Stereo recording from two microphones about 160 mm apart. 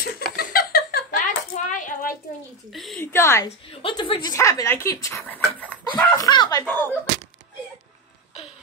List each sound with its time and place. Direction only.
0.0 s a sound: 70° left (ahead or behind)
1.2 s coin: 50° left (ahead or behind)
2.7 s speech: centre (ahead or behind)
3.0 s a woman's voice: 15° left (ahead or behind)
3.8 s speech: 30° left (ahead or behind); by 6.1 s 10° left (ahead or behind)
6.1 s speech: 25° left (ahead or behind)
6.6 s a woman's voice: 10° left (ahead or behind)